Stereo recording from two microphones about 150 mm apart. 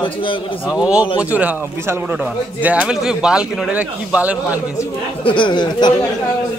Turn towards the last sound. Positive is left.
turn(degrees=30)  # may be behind; listen again after turning